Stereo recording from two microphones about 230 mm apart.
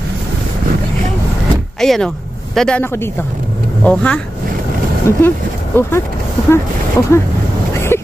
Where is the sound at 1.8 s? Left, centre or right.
Centre.